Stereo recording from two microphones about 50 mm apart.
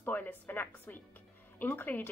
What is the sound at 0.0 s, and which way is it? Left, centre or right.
Speech, left.